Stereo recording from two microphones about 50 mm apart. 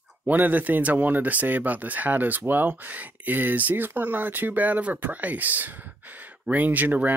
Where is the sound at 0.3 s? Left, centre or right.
Right.